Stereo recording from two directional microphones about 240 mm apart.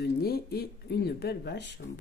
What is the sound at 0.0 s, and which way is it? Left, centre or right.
Speech, left.